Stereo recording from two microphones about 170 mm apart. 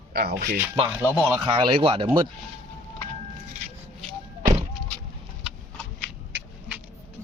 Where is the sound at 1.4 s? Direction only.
30° right (ahead or behind).